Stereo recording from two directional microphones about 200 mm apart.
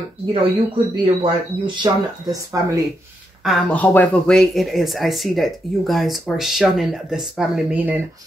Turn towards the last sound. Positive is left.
turn(degrees=-10)  # may be behind; listen again after turning